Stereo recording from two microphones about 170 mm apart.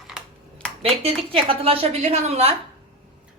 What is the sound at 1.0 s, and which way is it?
A woman's voice, 35° right (ahead or behind).